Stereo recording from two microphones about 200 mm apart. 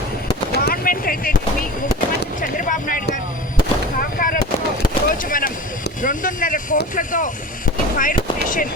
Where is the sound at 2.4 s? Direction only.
45° left (ahead or behind).